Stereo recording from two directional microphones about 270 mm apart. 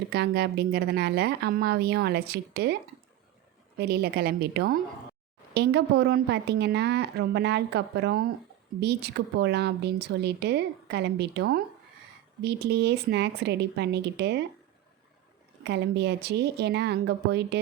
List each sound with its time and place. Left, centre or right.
0.1 s speech: right
3.8 s speech: right
15.6 s speech: right